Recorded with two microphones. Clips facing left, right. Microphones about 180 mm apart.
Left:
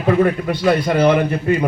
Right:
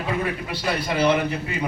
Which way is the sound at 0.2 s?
50° left (ahead or behind).